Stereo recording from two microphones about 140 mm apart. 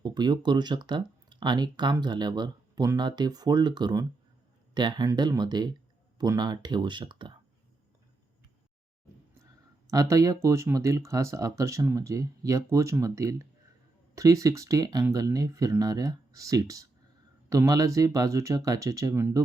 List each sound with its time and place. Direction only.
0.0 s speech: 30° right (ahead or behind)
9.9 s speech: 25° right (ahead or behind)